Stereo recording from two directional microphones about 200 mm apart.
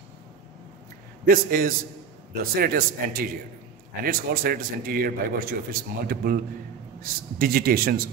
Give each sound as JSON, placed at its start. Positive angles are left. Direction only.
{"t": 1.2, "sound": "a man's voice", "side_deg": -45}